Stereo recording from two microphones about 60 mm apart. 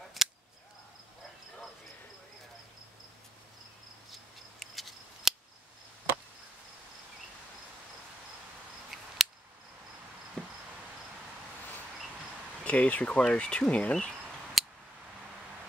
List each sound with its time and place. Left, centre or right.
0.2 s cap gun: centre
4.1 s scissors: centre
9.2 s cricket: centre
10.4 s cricket: centre
12.6 s speech: left
14.6 s a sound: centre